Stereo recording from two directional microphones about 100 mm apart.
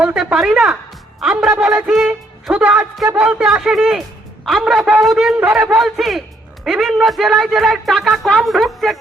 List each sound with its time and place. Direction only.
0.0 s a woman's voice: 10° right (ahead or behind)
1.5 s music: 20° right (ahead or behind)
2.5 s a woman's voice: 10° right (ahead or behind)